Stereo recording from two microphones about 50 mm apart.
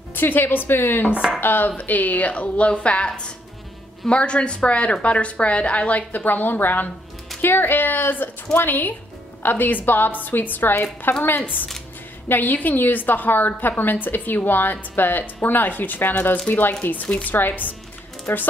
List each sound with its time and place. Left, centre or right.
0.1 s a woman's voice: left